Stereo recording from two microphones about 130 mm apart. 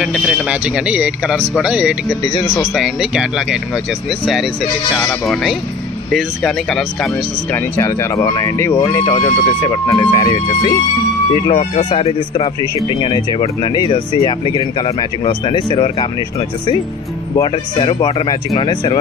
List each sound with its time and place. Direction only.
0.0 s speech: 5° right (ahead or behind)
4.9 s speech: centre (ahead or behind)
7.5 s speech: 20° left (ahead or behind)
11.4 s speech: 45° left (ahead or behind)
12.8 s speech: 35° left (ahead or behind)